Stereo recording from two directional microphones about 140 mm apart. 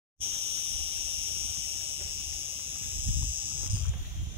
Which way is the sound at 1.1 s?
45° right (ahead or behind).